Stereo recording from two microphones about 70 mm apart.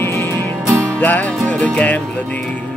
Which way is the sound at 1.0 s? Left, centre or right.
Left.